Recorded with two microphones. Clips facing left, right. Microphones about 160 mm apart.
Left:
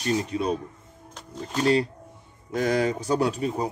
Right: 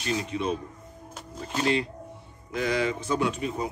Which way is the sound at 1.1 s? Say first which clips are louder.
Left 1 dB; 5° right (ahead or behind).